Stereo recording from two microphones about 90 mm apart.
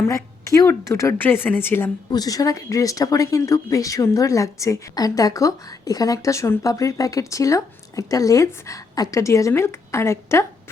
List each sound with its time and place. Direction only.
0.0 s a woman's voice: 40° left (ahead or behind)
1.2 s speech: 25° left (ahead or behind)
2.0 s speech: 45° left (ahead or behind); by 10.4 s 30° left (ahead or behind)